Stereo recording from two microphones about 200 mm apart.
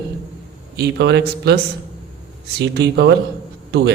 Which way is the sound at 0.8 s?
60° right (ahead or behind).